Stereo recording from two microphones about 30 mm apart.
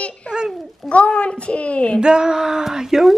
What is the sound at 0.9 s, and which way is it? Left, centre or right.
A woman's voice, left.